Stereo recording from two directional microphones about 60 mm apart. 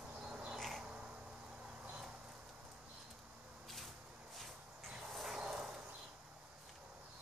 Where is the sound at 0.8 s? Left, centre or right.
Centre.